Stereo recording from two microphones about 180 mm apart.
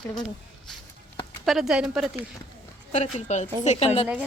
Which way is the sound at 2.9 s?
40° left (ahead or behind).